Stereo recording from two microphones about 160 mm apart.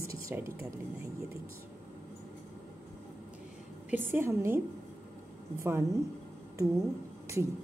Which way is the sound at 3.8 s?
10° right (ahead or behind).